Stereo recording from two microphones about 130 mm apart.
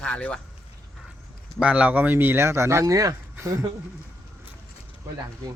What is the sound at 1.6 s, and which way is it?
Speech, 10° right (ahead or behind).